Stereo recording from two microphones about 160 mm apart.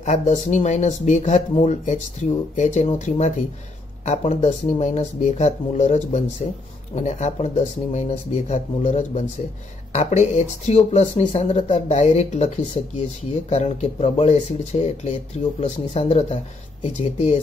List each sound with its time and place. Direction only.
0.0 s speech: 50° left (ahead or behind)